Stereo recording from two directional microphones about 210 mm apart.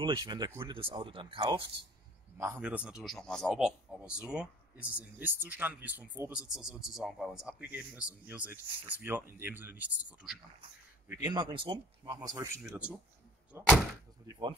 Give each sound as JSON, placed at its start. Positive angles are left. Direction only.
{"t": 0.0, "sound": "speech", "side_deg": -20}
{"t": 2.3, "sound": "a man's voice", "side_deg": -10}
{"t": 11.1, "sound": "speech", "side_deg": -20}
{"t": 12.6, "sound": "speech", "side_deg": -5}
{"t": 13.5, "sound": "door", "side_deg": -5}
{"t": 14.2, "sound": "speech", "side_deg": -15}